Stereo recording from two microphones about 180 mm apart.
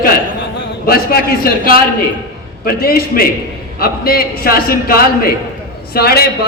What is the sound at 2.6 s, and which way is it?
A man's voice, 60° left (ahead or behind).